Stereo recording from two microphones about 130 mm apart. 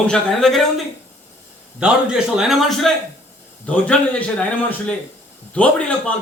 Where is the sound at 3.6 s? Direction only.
10° left (ahead or behind).